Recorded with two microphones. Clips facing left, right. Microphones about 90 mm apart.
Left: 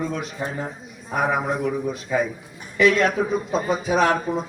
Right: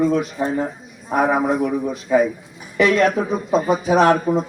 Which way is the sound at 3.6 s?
20° right (ahead or behind).